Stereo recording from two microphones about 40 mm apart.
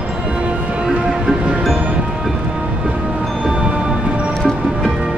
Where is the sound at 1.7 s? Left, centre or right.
Right.